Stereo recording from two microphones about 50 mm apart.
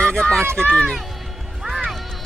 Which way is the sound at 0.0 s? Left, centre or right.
Centre.